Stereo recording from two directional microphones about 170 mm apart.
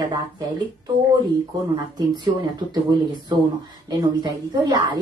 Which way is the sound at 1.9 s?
25° right (ahead or behind).